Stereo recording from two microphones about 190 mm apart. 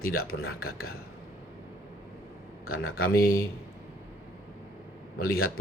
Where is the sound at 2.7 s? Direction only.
90° left.